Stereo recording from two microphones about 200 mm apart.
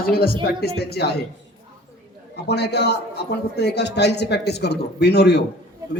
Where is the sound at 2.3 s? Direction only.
55° left (ahead or behind).